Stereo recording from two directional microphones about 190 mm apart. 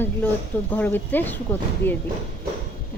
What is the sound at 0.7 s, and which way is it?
A woman's voice, 10° left (ahead or behind).